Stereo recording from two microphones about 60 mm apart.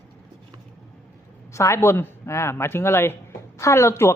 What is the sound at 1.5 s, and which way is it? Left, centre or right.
A woman's voice, left.